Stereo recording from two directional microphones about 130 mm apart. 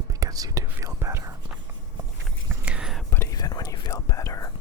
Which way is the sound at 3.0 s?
20° left (ahead or behind).